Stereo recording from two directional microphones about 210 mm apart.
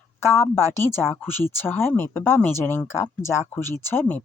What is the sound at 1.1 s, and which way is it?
Speech, 10° left (ahead or behind).